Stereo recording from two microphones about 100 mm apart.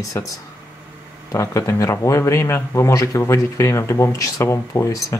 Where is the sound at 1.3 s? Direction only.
30° left (ahead or behind).